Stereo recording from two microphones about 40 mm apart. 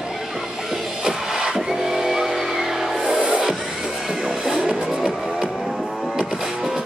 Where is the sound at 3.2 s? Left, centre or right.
Right.